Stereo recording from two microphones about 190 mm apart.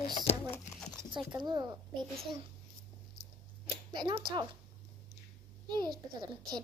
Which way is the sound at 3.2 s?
50° right (ahead or behind).